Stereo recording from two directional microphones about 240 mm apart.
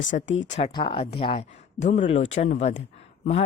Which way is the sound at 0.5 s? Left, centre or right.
Left.